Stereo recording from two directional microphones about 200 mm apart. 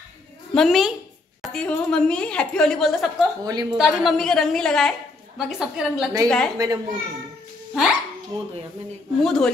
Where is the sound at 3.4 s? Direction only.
20° right (ahead or behind).